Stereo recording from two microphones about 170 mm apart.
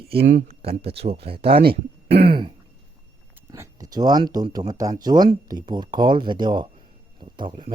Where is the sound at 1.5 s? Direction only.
65° right (ahead or behind).